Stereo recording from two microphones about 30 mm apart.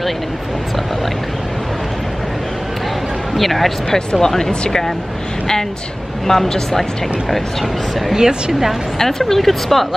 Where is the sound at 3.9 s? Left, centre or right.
Centre.